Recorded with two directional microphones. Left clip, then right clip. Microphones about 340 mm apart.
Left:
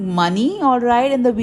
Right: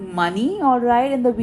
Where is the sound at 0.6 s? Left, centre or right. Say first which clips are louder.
Left 1 dB; centre.